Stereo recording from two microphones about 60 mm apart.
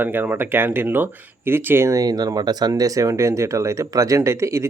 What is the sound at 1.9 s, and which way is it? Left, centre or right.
Speech, right.